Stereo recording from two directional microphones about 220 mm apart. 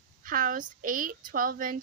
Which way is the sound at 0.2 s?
40° right (ahead or behind).